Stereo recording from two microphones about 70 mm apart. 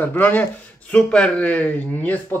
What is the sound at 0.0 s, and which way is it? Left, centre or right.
Speech, left.